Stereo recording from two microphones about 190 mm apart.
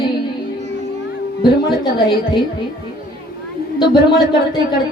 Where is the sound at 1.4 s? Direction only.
25° left (ahead or behind).